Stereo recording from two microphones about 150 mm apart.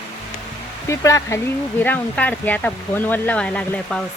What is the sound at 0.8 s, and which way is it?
Speech, 20° left (ahead or behind).